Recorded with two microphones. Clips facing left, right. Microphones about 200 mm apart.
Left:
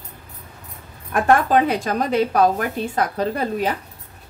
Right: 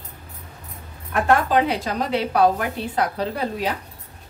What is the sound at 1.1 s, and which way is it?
A woman's voice, 50° left (ahead or behind).